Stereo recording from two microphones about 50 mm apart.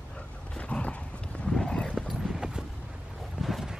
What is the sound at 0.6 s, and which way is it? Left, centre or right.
Horse, left.